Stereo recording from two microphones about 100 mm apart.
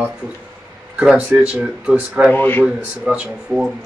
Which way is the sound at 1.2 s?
10° right (ahead or behind).